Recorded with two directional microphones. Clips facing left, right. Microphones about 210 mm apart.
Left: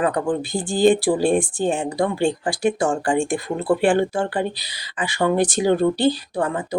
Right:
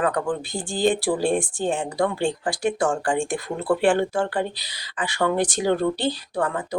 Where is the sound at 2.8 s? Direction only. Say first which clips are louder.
Left 3 dB; 15° left (ahead or behind).